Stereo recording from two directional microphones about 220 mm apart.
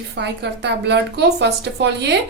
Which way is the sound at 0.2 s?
50° right (ahead or behind).